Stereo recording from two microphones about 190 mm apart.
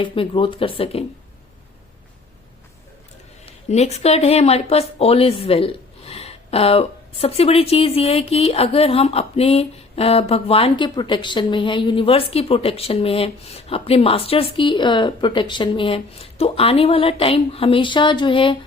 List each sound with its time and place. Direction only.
0.0 s speech: 25° left (ahead or behind)
3.7 s speech: 35° left (ahead or behind)